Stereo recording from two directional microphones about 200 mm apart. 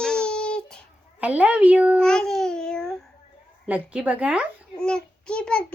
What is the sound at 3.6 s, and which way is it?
A child's voice, 5° right (ahead or behind).